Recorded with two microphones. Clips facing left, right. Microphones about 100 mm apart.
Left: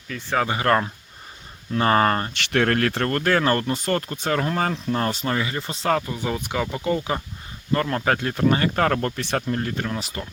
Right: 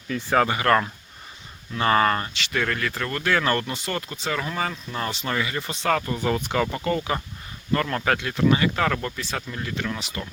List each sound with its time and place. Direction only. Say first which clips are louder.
0.4 s speech: even; 30° left (ahead or behind)
2.3 s speech: left 5 dB; 65° left (ahead or behind); by 5.3 s 40° left (ahead or behind)
5.3 s speech: left 1 dB; 30° left (ahead or behind)
6.0 s speech: right 2 dB; 10° left (ahead or behind)
7.7 s speech: left 1 dB; 30° left (ahead or behind)